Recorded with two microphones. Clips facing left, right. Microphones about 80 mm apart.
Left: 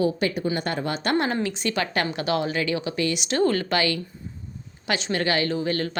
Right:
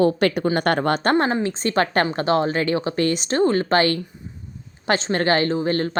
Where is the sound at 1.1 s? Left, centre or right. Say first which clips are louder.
Even; right.